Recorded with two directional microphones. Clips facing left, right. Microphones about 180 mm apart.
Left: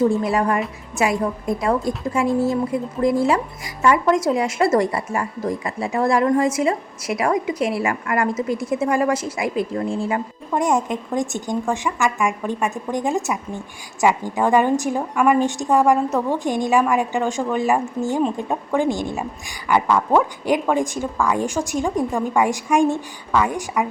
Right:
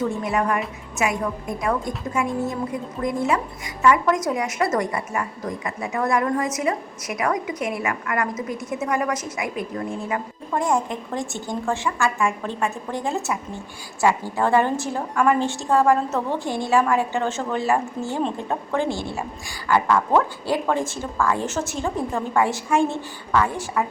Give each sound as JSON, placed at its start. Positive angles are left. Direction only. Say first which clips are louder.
{"t": 0.0, "sound": "a woman's voice", "louder": "left 5 dB", "side_deg": 30}